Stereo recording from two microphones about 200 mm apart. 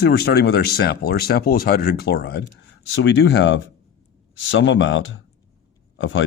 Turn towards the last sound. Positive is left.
turn(degrees=70)  # may be behind; listen again after turning